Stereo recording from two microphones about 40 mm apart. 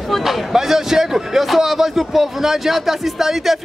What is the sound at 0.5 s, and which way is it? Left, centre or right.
A man's voice, centre.